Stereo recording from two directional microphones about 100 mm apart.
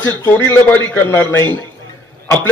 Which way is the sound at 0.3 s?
20° left (ahead or behind).